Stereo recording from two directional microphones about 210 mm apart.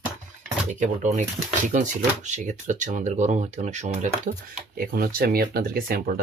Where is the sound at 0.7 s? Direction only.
35° right (ahead or behind).